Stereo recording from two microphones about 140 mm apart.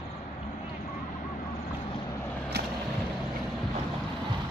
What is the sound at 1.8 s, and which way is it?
Vehicle, 35° left (ahead or behind).